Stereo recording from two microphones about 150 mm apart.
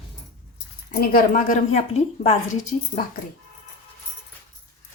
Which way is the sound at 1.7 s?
45° left (ahead or behind).